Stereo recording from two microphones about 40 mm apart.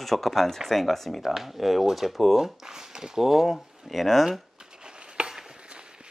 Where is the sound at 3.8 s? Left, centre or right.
Centre.